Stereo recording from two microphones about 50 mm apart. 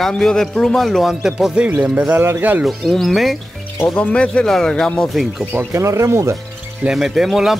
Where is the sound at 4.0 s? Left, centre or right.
Left.